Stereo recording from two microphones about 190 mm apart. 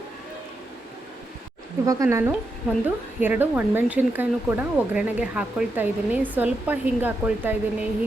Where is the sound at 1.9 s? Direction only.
15° right (ahead or behind).